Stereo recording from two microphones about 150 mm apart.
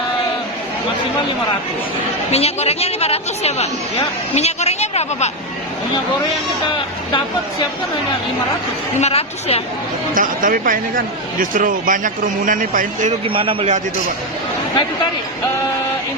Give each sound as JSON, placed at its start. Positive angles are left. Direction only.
{"t": 2.3, "sound": "a woman's voice", "side_deg": 45}
{"t": 9.0, "sound": "a woman's voice", "side_deg": 45}
{"t": 10.2, "sound": "speech", "side_deg": -65}
{"t": 13.2, "sound": "a man's voice", "side_deg": -35}